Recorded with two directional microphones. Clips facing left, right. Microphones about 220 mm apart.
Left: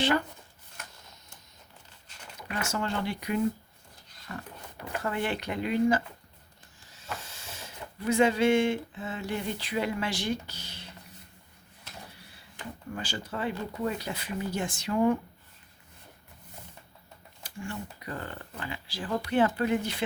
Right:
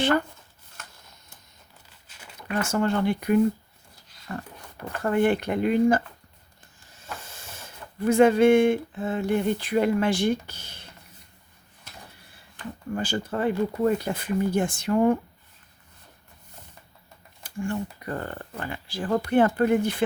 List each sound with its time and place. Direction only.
2.6 s speech: 50° right (ahead or behind)
4.3 s a sound: 40° right (ahead or behind)
5.0 s speech: 50° right (ahead or behind)
7.3 s speech: 50° right (ahead or behind)
12.9 s speech: 50° right (ahead or behind)
17.4 s speech: 50° right (ahead or behind)